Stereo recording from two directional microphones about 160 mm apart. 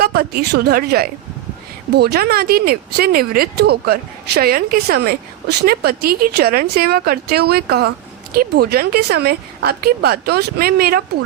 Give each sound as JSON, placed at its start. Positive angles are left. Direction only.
{"t": 0.0, "sound": "a woman's voice", "side_deg": -70}
{"t": 1.9, "sound": "a woman's voice", "side_deg": -90}
{"t": 4.4, "sound": "a woman's voice", "side_deg": -70}